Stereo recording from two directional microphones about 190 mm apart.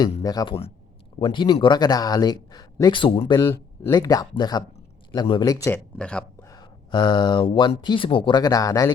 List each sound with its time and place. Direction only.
0.0 s speech: 20° left (ahead or behind)
6.0 s speech: 5° left (ahead or behind)
6.5 s a sound: 20° left (ahead or behind)
7.4 s speech: 30° left (ahead or behind)